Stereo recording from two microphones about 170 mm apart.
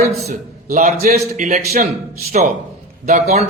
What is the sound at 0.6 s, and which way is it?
A man's voice, 45° right (ahead or behind).